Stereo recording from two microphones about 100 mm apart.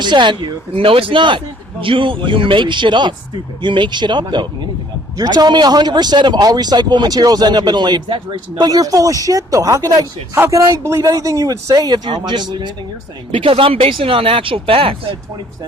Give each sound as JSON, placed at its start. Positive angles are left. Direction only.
{"t": 0.0, "sound": "a man's voice", "side_deg": -50}
{"t": 5.1, "sound": "a man's voice", "side_deg": -40}
{"t": 10.3, "sound": "speech", "side_deg": -25}
{"t": 13.3, "sound": "speech", "side_deg": -65}